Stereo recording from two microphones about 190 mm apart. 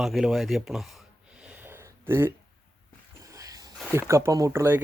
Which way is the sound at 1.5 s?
10° right (ahead or behind).